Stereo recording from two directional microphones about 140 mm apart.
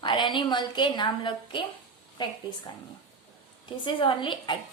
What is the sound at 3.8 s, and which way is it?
Speech, 35° left (ahead or behind).